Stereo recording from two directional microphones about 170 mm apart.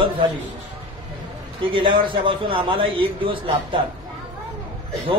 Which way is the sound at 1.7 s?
30° right (ahead or behind).